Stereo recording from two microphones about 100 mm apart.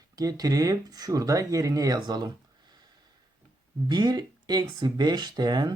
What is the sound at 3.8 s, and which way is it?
Speech, 45° right (ahead or behind).